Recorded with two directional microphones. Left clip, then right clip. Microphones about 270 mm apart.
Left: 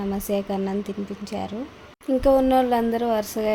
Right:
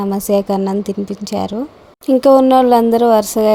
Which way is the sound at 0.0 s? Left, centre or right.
Right.